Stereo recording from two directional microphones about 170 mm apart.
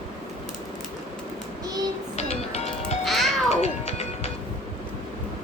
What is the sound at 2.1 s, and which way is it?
Music, 40° left (ahead or behind).